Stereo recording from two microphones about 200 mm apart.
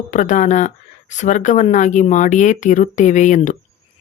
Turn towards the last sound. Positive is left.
turn(degrees=40)  # may be behind; listen again after turning